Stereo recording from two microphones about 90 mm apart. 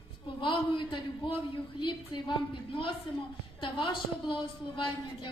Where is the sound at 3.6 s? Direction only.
65° left (ahead or behind).